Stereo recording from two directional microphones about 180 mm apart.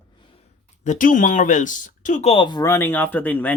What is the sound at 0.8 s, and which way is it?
Speech, 50° left (ahead or behind).